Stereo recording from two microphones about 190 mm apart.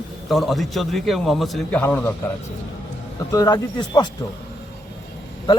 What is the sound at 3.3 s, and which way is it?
Speech, 20° left (ahead or behind).